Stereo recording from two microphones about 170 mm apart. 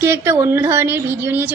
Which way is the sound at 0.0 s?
15° right (ahead or behind).